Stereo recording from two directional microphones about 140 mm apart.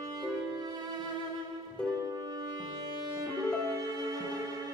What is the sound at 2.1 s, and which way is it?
Music, 30° right (ahead or behind).